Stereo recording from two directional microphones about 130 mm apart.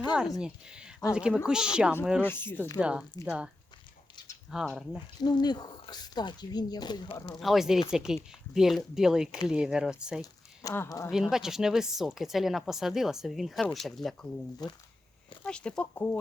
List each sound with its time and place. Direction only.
0.3 s a woman's voice: 5° right (ahead or behind)
2.2 s speech: 15° left (ahead or behind)
2.8 s speech: 10° right (ahead or behind)
4.5 s a woman's voice: centre (ahead or behind)
5.2 s speech: 35° left (ahead or behind)
7.3 s a woman's voice: centre (ahead or behind)
10.2 s speech: 25° left (ahead or behind)
11.1 s a woman's voice: 5° right (ahead or behind)
14.6 s speech: 35° left (ahead or behind)
15.4 s speech: 5° left (ahead or behind)